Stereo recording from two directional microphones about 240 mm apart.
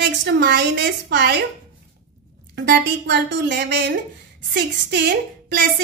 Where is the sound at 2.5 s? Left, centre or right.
Right.